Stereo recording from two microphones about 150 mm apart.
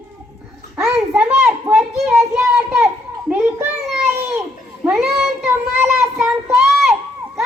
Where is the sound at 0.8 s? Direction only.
5° right (ahead or behind).